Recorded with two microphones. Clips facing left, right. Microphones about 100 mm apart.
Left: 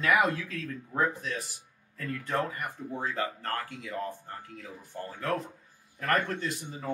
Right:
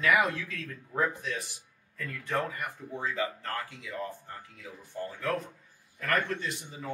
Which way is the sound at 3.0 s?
45° left (ahead or behind).